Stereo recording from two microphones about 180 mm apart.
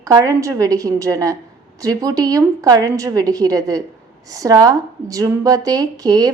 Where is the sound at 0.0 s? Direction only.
20° right (ahead or behind).